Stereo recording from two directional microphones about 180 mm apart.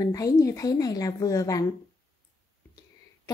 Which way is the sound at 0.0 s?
20° left (ahead or behind).